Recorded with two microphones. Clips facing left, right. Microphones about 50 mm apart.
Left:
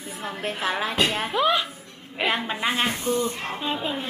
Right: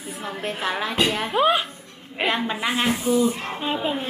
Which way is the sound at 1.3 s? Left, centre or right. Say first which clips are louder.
Right 4 dB; right.